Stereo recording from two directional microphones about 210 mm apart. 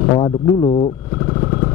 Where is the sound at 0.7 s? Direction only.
25° left (ahead or behind).